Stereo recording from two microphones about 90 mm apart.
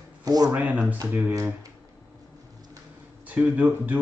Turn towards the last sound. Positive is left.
turn(degrees=-20)  # may be behind; listen again after turning